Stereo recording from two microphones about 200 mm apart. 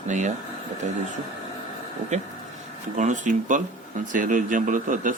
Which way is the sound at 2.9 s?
35° right (ahead or behind).